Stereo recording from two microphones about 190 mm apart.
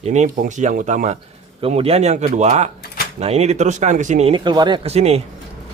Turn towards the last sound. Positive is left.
turn(degrees=-35)  # may be behind; listen again after turning